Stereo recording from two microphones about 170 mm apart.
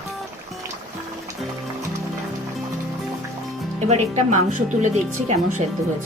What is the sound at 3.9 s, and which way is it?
Speech, 40° right (ahead or behind).